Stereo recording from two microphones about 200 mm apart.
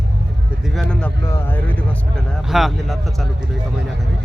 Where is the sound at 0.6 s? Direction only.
Centre (ahead or behind).